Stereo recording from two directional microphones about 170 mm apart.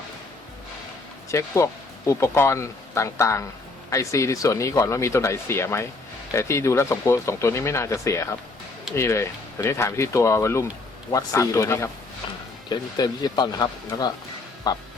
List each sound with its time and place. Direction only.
1.3 s speech: 15° left (ahead or behind)